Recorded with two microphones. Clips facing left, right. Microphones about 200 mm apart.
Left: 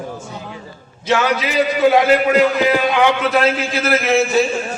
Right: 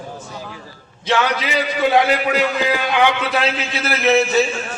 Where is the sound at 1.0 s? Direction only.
5° left (ahead or behind).